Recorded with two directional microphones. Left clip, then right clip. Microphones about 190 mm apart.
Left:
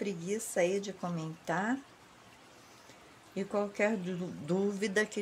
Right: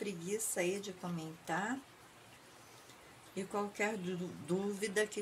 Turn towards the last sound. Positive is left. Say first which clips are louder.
# left 4 dB
turn(degrees=50)  # may be behind; listen again after turning